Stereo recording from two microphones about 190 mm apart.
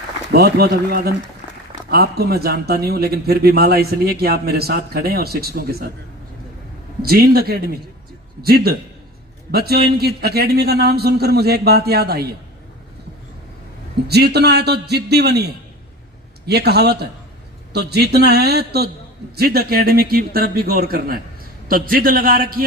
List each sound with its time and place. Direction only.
0.3 s speech: 55° right (ahead or behind)
7.0 s a man's voice: 55° right (ahead or behind)
14.1 s speech: 60° right (ahead or behind)
16.5 s a man's voice: 60° right (ahead or behind)